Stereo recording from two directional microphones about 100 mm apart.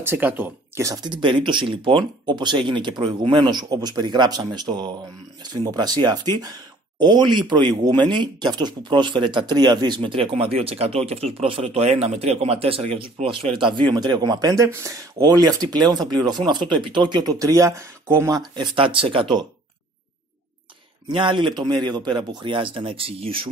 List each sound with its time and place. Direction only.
0.0 s speech: 20° right (ahead or behind)
0.7 s speech: 30° right (ahead or behind)
1.0 s speech: 50° right (ahead or behind)
10.1 s speech: 65° right (ahead or behind); by 14.7 s 40° right (ahead or behind)
14.7 s speech: 30° right (ahead or behind)
18.5 s speech: 55° right (ahead or behind)
21.1 s speech: 55° right (ahead or behind)